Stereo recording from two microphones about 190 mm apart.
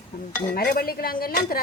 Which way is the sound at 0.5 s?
50° left (ahead or behind).